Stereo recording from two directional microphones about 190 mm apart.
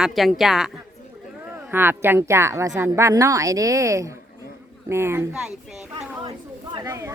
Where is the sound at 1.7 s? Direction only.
10° right (ahead or behind).